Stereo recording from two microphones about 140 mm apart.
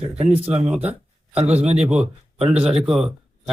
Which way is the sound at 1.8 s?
5° right (ahead or behind).